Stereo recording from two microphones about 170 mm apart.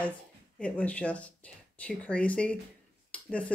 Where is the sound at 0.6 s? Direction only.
5° left (ahead or behind).